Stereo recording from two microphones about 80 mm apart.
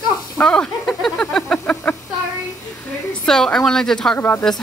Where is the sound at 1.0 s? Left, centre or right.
Centre.